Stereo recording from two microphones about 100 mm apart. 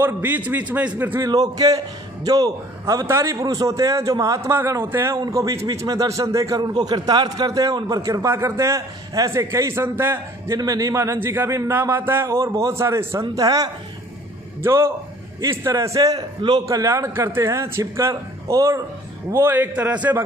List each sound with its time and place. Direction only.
0.0 s a man's voice: 20° right (ahead or behind)
1.2 s a man's voice: 40° right (ahead or behind)
3.3 s a man's voice: 40° right (ahead or behind)
6.6 s a man's voice: 45° right (ahead or behind); by 10.6 s 25° right (ahead or behind)
10.6 s a man's voice: 35° right (ahead or behind)
14.6 s a man's voice: 25° right (ahead or behind); by 16.6 s 45° right (ahead or behind)
16.6 s a man's voice: 30° right (ahead or behind); by 20.2 s 15° right (ahead or behind)